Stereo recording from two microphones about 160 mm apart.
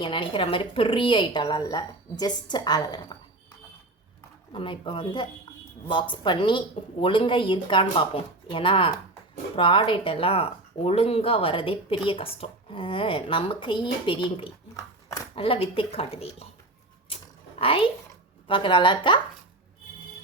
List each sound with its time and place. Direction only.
0.0 s a woman's voice: 30° left (ahead or behind)
4.5 s speech: 30° left (ahead or behind)
17.6 s a woman's voice: 35° left (ahead or behind)